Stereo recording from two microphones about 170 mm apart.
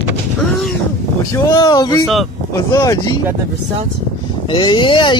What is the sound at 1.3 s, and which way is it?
Speech, 25° left (ahead or behind).